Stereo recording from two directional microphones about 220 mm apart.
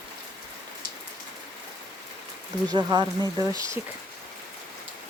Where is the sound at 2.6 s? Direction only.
20° right (ahead or behind).